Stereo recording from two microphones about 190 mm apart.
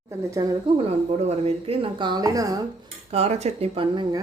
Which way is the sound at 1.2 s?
30° right (ahead or behind).